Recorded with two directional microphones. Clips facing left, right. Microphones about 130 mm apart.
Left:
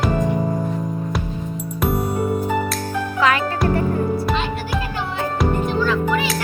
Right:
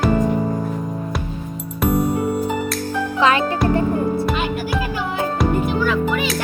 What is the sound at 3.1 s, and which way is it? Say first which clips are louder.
Music: right 2 dB; 25° right (ahead or behind).